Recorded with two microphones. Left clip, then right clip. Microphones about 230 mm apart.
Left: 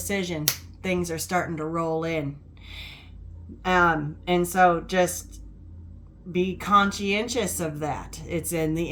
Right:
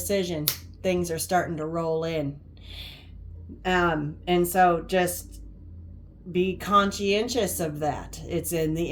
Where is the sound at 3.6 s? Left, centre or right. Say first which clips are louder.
Left 3 dB; centre.